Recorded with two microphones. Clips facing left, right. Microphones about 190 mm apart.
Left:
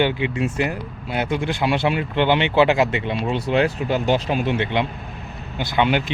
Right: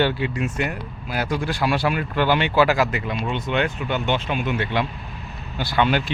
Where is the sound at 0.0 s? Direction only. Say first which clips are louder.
Left 1 dB; 15° left (ahead or behind).